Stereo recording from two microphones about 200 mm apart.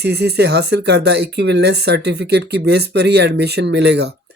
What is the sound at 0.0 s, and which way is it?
Speech, 55° right (ahead or behind).